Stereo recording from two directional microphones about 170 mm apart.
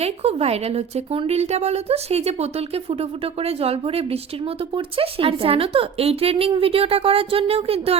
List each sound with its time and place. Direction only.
0.0 s speech: 35° right (ahead or behind)